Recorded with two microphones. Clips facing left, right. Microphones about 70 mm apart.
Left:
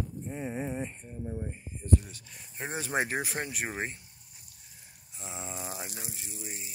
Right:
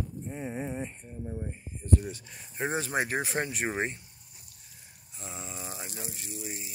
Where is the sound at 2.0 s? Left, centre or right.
Centre.